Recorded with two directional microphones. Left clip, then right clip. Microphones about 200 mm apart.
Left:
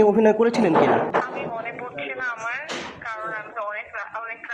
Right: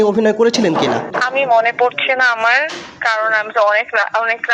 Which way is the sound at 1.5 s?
60° right (ahead or behind).